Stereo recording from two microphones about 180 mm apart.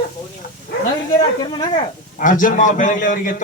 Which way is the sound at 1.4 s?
25° left (ahead or behind).